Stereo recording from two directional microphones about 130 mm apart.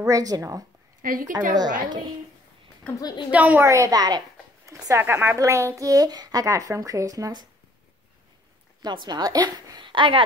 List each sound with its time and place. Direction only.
0.0 s speech: 25° right (ahead or behind)
1.0 s a woman's voice: 90° right
1.8 s a woman's voice: 35° right (ahead or behind)
3.0 s a woman's voice: 30° left (ahead or behind)
3.3 s a woman's voice: 10° right (ahead or behind)
3.6 s speech: 25° right (ahead or behind)
8.8 s a woman's voice: 35° right (ahead or behind)